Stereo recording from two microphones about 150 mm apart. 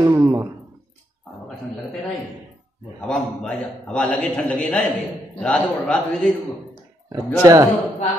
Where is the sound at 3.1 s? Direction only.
10° left (ahead or behind).